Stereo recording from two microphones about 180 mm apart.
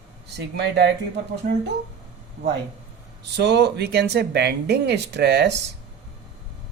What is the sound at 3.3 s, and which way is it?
Speech, 70° right (ahead or behind).